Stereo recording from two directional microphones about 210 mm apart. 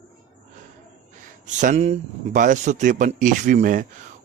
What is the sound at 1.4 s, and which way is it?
A man's voice, 35° right (ahead or behind).